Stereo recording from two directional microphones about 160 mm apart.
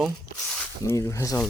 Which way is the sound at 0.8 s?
20° left (ahead or behind).